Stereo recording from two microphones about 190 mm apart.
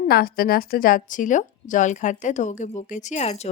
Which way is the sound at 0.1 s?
50° left (ahead or behind).